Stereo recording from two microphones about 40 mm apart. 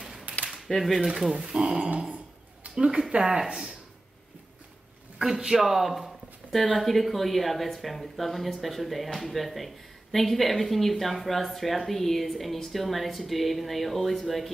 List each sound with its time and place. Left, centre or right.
0.7 s speech: centre
1.5 s speech: centre
2.6 s a sound: right
3.1 s speech: centre
5.2 s speech: centre